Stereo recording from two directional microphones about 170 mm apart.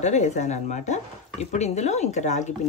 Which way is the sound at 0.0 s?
45° left (ahead or behind).